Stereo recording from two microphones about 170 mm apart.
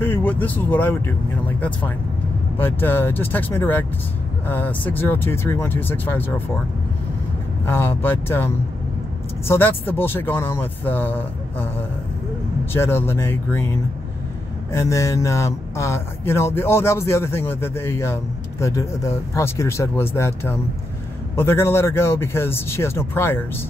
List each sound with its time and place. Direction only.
0.0 s speech: 10° left (ahead or behind)
2.5 s speech: 10° left (ahead or behind)
7.6 s speech: 15° left (ahead or behind)
12.7 s speech: 15° left (ahead or behind)